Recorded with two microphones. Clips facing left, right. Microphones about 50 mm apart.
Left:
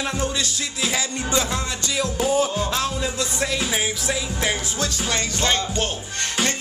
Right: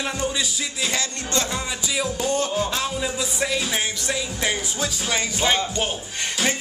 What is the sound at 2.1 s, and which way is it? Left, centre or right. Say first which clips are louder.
A man's voice: left 4 dB; centre.